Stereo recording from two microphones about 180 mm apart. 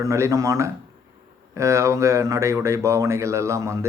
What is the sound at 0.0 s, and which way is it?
Speech, 15° right (ahead or behind).